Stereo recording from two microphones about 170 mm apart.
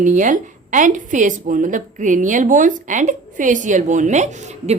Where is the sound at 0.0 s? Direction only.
50° right (ahead or behind).